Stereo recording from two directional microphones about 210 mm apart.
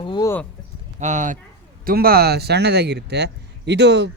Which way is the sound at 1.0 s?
35° right (ahead or behind).